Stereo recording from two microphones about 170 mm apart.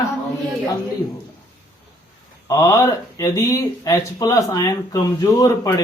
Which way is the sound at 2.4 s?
15° left (ahead or behind).